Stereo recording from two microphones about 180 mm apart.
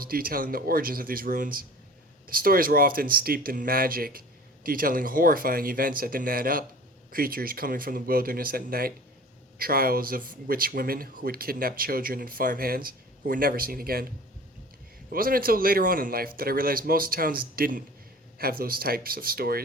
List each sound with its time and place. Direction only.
0.0 s speech: 55° right (ahead or behind)
15.1 s speech: 55° right (ahead or behind)